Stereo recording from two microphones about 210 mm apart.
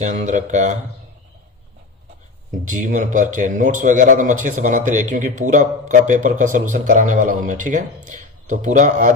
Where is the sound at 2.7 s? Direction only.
35° right (ahead or behind).